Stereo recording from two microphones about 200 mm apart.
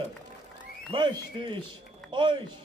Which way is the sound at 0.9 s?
25° right (ahead or behind).